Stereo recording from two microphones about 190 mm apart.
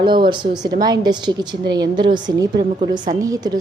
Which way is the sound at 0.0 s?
25° right (ahead or behind).